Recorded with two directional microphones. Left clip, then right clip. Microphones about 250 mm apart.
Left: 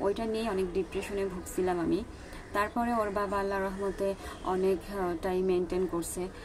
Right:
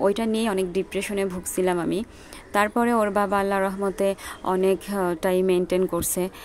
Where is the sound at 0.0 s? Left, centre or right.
Right.